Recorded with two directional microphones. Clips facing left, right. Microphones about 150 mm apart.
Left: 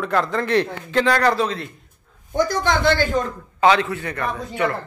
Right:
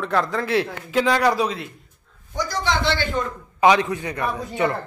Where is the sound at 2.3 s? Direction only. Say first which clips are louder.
Left 4 dB; 50° left (ahead or behind).